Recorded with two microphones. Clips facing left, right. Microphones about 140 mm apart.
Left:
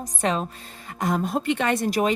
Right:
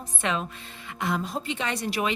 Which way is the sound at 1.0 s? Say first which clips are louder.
Left 5 dB; 50° left (ahead or behind).